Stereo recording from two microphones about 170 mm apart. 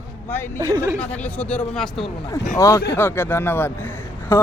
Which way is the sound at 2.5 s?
20° left (ahead or behind).